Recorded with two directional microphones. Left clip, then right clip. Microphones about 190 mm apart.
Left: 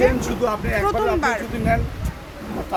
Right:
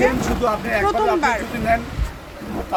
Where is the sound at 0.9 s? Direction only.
5° left (ahead or behind).